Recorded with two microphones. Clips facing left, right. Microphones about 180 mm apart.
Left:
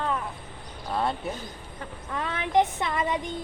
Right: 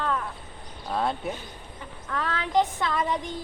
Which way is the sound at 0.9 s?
Centre (ahead or behind).